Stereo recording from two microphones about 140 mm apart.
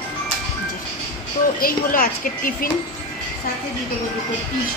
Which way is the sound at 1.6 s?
90° left.